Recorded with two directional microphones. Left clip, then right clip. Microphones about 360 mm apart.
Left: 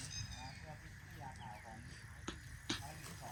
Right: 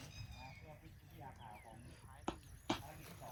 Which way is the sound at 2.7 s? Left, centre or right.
Centre.